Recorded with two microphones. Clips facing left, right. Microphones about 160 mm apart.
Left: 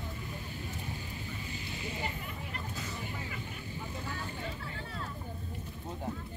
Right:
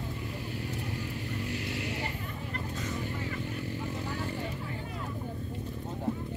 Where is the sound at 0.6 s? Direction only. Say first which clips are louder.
Right 5 dB; 75° right (ahead or behind).